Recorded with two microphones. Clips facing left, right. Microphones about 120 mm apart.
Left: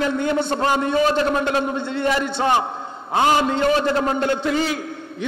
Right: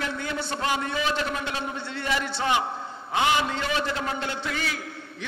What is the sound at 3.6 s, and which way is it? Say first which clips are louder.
Speech: left 9 dB; 50° left (ahead or behind).